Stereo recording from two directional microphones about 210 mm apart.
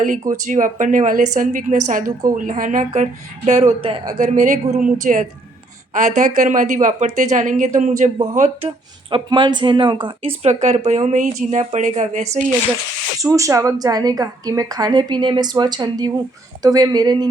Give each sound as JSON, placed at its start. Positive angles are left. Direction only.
{"t": 0.4, "sound": "speech", "side_deg": -40}
{"t": 4.2, "sound": "speech", "side_deg": -35}
{"t": 13.1, "sound": "a woman's voice", "side_deg": -15}